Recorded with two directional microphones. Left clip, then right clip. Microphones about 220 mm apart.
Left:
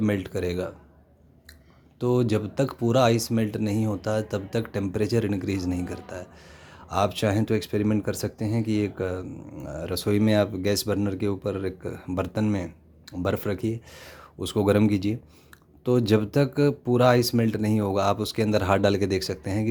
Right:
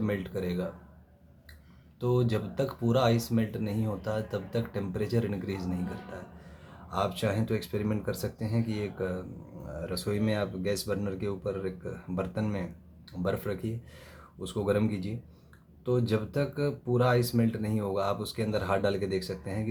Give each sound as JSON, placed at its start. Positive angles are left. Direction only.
{"t": 0.0, "sound": "speech", "side_deg": 40}
{"t": 2.0, "sound": "speech", "side_deg": 35}